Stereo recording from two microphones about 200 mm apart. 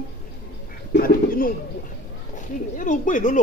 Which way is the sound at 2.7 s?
40° left (ahead or behind).